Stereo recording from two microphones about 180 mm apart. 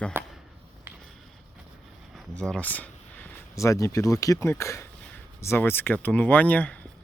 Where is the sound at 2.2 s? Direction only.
5° left (ahead or behind).